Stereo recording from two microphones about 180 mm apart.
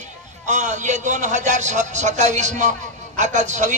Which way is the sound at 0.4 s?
45° right (ahead or behind).